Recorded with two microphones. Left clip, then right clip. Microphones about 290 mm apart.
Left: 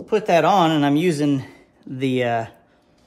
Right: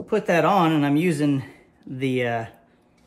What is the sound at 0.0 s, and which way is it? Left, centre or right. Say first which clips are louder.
Speech: left 3 dB; centre.